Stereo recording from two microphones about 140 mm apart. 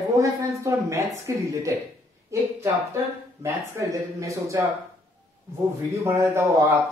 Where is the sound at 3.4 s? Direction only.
20° right (ahead or behind).